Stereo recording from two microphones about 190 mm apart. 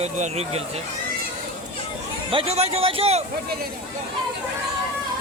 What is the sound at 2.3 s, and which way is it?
Speech, 30° right (ahead or behind).